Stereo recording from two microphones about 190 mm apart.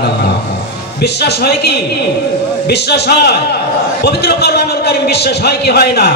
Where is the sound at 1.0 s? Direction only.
60° left (ahead or behind).